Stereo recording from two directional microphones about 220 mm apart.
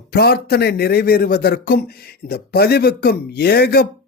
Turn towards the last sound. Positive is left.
turn(degrees=45)  # may be behind; listen again after turning